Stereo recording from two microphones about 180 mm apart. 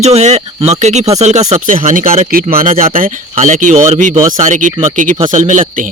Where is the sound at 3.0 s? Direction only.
45° right (ahead or behind).